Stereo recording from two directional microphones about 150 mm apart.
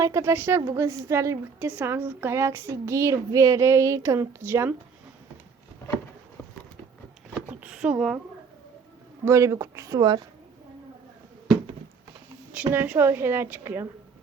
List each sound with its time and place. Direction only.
0.0 s a woman's voice: 20° right (ahead or behind)
7.5 s speech: 10° right (ahead or behind)
9.2 s speech: 20° right (ahead or behind)
12.7 s a woman's voice: 15° right (ahead or behind)